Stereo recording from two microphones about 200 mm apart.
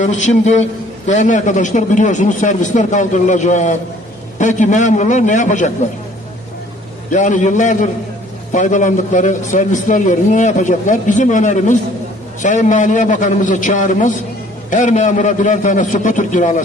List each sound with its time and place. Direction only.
0.0 s a man's voice: 35° left (ahead or behind)
7.1 s a man's voice: 40° left (ahead or behind)